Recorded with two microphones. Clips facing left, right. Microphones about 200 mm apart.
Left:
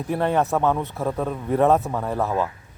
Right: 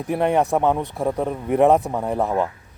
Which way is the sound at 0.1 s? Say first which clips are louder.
Right 2 dB; 15° right (ahead or behind).